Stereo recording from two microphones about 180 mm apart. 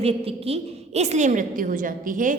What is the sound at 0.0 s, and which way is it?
A woman's voice, 35° right (ahead or behind).